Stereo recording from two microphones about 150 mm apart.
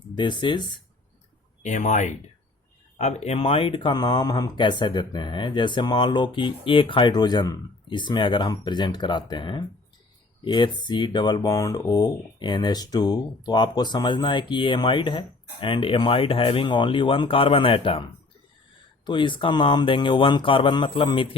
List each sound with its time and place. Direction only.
0.2 s speech: 30° left (ahead or behind)
1.6 s speech: 55° left (ahead or behind); by 18.0 s 40° left (ahead or behind)
19.0 s speech: 30° left (ahead or behind)